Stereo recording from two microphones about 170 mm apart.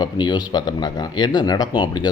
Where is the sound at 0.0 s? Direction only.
25° left (ahead or behind).